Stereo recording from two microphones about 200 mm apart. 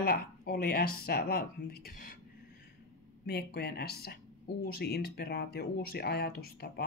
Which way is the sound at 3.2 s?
55° left (ahead or behind).